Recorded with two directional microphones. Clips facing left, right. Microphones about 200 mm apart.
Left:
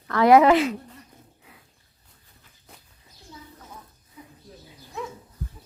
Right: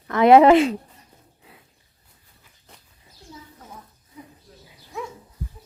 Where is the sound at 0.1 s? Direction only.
25° right (ahead or behind).